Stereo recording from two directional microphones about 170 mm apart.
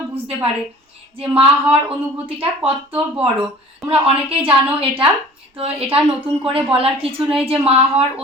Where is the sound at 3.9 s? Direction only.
35° right (ahead or behind).